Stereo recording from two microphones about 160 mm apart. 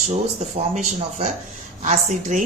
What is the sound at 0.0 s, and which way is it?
A woman's voice, 50° right (ahead or behind).